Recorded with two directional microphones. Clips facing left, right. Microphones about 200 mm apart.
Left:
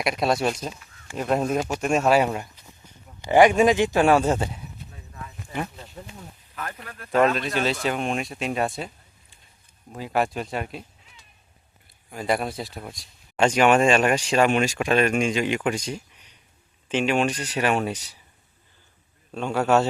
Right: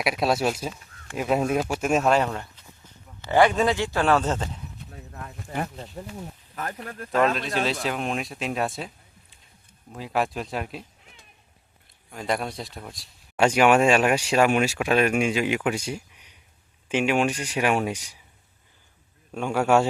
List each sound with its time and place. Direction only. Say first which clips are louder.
0.0 s speech: even; centre (ahead or behind)
5.1 s a sound: right 1 dB; 45° right (ahead or behind)
7.1 s speech: left 2 dB; centre (ahead or behind)
9.9 s speech: left 2 dB; centre (ahead or behind)
11.0 s a sound: right 2 dB; 55° right (ahead or behind)
12.1 s speech: left 3 dB; 5° left (ahead or behind)
19.3 s speech: even; 10° right (ahead or behind)